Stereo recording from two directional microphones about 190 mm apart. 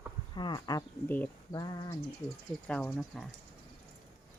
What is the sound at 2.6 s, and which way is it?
Speech, 5° left (ahead or behind).